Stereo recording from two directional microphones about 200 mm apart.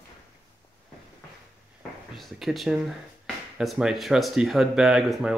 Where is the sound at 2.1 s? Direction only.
Centre (ahead or behind).